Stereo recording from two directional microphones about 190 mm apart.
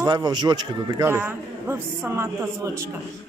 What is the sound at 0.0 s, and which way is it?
A man's voice, 20° right (ahead or behind).